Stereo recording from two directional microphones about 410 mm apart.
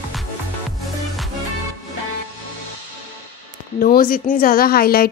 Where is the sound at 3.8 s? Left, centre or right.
Left.